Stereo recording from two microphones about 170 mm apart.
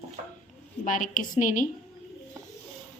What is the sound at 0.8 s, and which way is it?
Speech, 50° left (ahead or behind).